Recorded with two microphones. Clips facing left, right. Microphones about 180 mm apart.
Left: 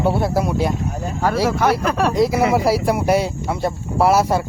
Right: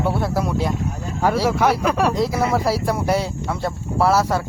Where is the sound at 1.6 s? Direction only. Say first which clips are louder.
Even; 5° right (ahead or behind).